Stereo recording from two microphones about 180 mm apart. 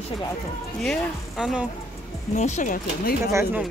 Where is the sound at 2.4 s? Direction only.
40° left (ahead or behind).